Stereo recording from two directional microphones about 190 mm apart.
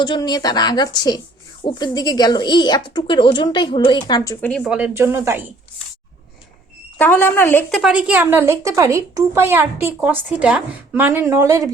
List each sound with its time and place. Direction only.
0.0 s speech: 20° left (ahead or behind); by 5.5 s 15° right (ahead or behind)
7.0 s speech: 10° left (ahead or behind)
7.8 s a woman's voice: 5° right (ahead or behind)